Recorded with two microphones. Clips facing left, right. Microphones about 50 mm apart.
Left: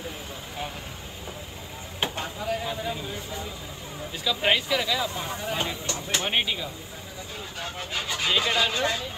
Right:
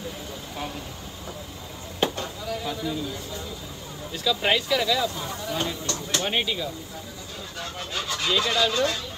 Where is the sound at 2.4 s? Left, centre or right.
Left.